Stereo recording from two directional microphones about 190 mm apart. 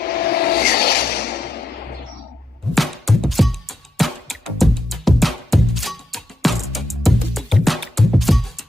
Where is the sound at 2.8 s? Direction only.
Centre (ahead or behind).